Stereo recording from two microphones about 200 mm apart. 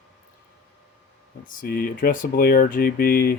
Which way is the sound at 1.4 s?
45° left (ahead or behind).